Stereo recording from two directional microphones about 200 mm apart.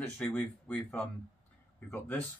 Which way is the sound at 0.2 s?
10° left (ahead or behind).